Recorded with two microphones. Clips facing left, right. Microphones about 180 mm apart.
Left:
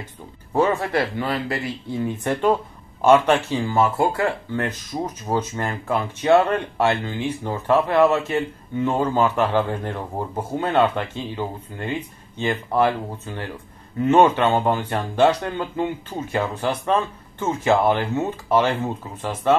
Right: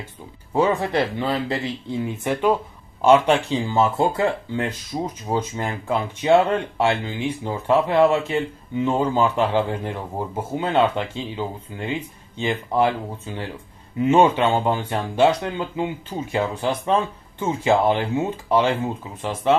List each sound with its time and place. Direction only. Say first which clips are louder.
0.0 s speech: even; 10° right (ahead or behind)